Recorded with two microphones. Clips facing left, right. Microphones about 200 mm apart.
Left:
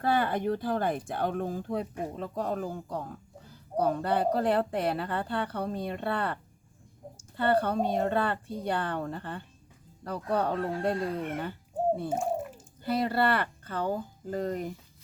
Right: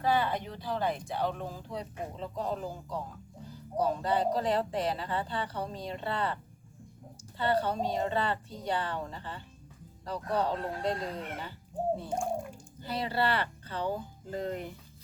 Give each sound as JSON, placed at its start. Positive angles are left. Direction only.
{"t": 0.0, "sound": "a woman's voice", "side_deg": 50}
{"t": 12.0, "sound": "a sound", "side_deg": 5}
{"t": 12.8, "sound": "speech", "side_deg": 55}